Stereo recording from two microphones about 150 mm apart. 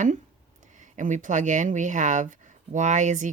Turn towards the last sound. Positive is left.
turn(degrees=-55)  # may be behind; listen again after turning